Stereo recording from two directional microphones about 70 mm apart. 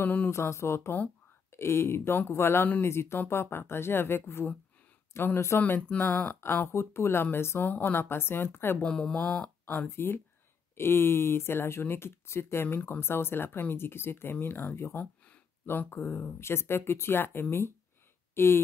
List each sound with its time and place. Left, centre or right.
0.0 s a sound: left
0.3 s speech: left
5.6 s speech: left
8.8 s speech: centre
9.8 s speech: left